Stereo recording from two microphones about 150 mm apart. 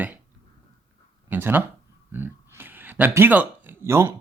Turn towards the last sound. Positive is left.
turn(degrees=-15)  # may be behind; listen again after turning